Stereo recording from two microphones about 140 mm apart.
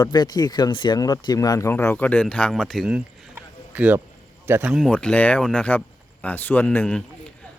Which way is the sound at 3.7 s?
10° right (ahead or behind).